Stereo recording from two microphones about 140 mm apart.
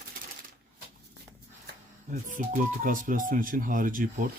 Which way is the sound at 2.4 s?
75° right (ahead or behind).